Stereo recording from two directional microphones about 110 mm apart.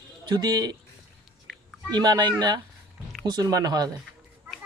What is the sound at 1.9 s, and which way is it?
Speech, 40° right (ahead or behind).